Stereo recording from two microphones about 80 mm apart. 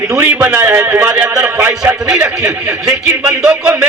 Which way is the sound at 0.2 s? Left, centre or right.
Right.